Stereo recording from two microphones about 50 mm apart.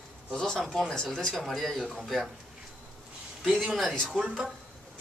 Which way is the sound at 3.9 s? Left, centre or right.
Centre.